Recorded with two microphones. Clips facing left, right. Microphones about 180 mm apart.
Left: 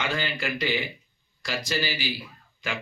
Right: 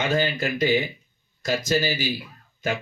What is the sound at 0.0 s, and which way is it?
Speech, 45° right (ahead or behind).